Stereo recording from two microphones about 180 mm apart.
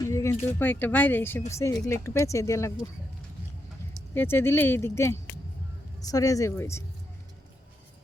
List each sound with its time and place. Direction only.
0.0 s a sound: 15° left (ahead or behind)
0.6 s speech: 10° left (ahead or behind)
4.1 s speech: 10° left (ahead or behind)